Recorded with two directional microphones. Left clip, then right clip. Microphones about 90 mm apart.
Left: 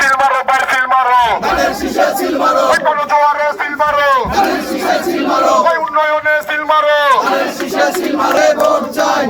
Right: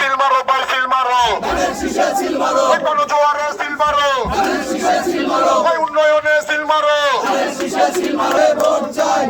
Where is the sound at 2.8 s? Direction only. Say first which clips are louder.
Left 3 dB; 30° right (ahead or behind).